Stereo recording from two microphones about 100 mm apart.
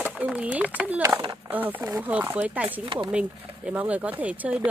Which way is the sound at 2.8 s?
50° right (ahead or behind).